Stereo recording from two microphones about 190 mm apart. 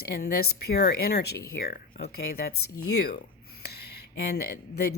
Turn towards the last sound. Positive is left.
turn(degrees=55)  # may be behind; listen again after turning